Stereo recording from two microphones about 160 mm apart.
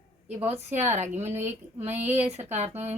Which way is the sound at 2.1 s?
45° right (ahead or behind).